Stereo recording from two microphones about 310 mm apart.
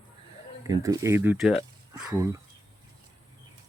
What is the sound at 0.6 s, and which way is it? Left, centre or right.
Speech, centre.